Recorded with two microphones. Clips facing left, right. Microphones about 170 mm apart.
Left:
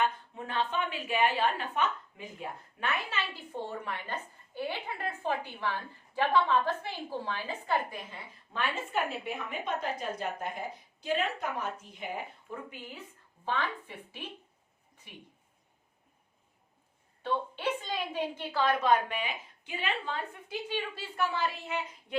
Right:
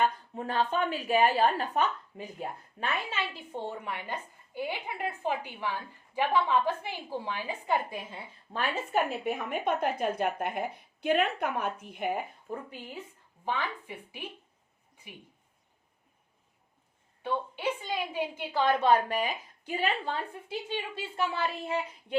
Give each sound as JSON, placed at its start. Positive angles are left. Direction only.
{"t": 0.0, "sound": "a woman's voice", "side_deg": -40}
{"t": 8.5, "sound": "a woman's voice", "side_deg": -40}
{"t": 12.5, "sound": "a woman's voice", "side_deg": -40}
{"t": 13.4, "sound": "a woman's voice", "side_deg": -15}
{"t": 17.2, "sound": "a woman's voice", "side_deg": -10}
{"t": 18.6, "sound": "a woman's voice", "side_deg": -30}